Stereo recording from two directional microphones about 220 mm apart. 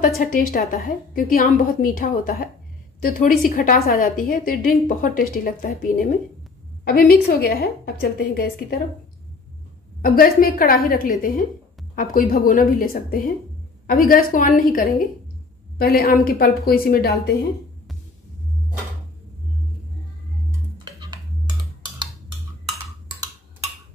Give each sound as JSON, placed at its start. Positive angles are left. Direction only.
{"t": 0.2, "sound": "a woman's voice", "side_deg": 40}
{"t": 6.8, "sound": "a woman's voice", "side_deg": 45}
{"t": 10.0, "sound": "a woman's voice", "side_deg": 40}
{"t": 20.8, "sound": "tick-tock", "side_deg": -20}